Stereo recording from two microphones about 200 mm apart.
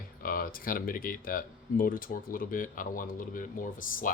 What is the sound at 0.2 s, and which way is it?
Speech, 45° left (ahead or behind).